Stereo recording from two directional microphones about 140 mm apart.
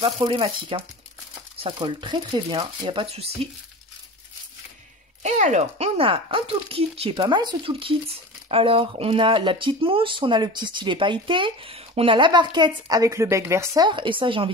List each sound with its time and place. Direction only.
0.0 s speech: 35° right (ahead or behind)
5.2 s speech: 55° right (ahead or behind); by 13.8 s 20° right (ahead or behind)
13.8 s speech: 35° right (ahead or behind)